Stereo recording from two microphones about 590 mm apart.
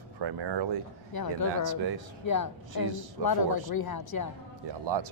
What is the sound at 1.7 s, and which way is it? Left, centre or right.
Speech, right.